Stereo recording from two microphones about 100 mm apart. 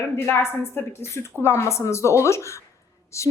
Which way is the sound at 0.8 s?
25° left (ahead or behind).